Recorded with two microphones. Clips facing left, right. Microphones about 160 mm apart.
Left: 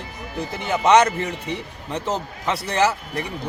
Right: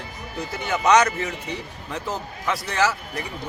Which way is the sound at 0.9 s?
25° left (ahead or behind).